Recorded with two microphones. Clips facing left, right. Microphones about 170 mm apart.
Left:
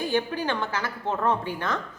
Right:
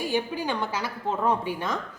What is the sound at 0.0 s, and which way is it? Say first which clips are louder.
A woman's voice: left 1 dB; 10° right (ahead or behind).